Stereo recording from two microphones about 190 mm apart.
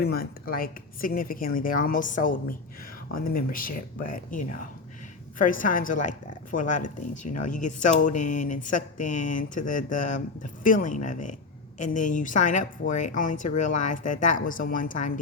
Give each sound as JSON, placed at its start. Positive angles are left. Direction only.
{"t": 0.0, "sound": "speech", "side_deg": 55}
{"t": 5.4, "sound": "speech", "side_deg": 45}